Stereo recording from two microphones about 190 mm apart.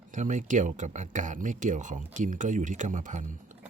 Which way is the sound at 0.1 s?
40° right (ahead or behind).